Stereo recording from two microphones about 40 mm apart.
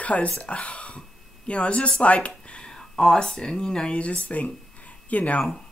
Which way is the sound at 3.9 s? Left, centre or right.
Left.